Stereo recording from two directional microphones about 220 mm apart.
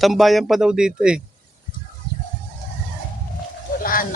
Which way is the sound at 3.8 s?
40° left (ahead or behind).